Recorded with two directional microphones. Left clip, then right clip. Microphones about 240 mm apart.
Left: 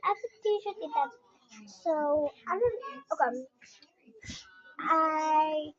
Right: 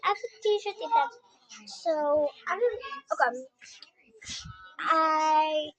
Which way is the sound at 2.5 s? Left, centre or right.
Right.